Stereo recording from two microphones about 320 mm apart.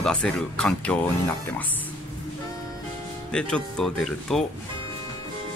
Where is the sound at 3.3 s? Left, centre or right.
Centre.